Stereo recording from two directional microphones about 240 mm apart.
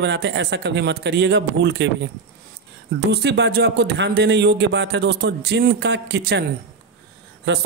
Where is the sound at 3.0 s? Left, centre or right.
Right.